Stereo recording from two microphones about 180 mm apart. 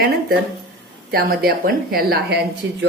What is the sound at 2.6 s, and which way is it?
Speech, 80° right.